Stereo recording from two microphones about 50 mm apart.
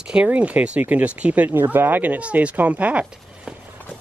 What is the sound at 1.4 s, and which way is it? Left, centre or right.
Speech, right.